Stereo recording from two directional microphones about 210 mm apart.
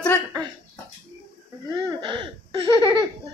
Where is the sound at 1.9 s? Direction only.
20° right (ahead or behind).